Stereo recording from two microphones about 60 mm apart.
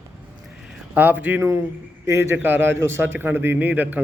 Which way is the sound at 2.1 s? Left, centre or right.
Right.